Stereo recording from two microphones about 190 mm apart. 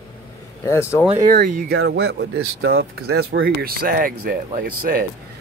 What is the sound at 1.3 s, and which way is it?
Speech, 55° right (ahead or behind).